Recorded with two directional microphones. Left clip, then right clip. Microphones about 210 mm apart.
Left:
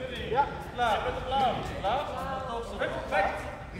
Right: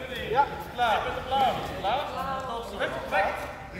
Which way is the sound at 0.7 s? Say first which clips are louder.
Right 2 dB; 5° left (ahead or behind).